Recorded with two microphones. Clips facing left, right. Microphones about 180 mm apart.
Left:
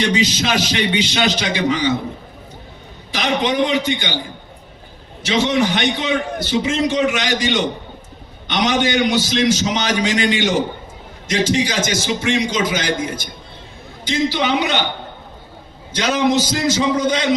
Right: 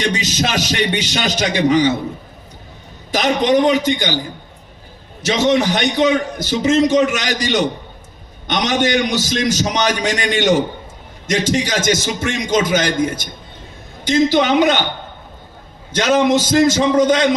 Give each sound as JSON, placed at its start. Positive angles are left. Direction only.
{"t": 0.0, "sound": "a man's voice", "side_deg": -45}
{"t": 3.1, "sound": "a man's voice", "side_deg": -40}
{"t": 5.2, "sound": "a man's voice", "side_deg": -40}
{"t": 14.0, "sound": "a man's voice", "side_deg": -45}
{"t": 15.9, "sound": "a man's voice", "side_deg": -50}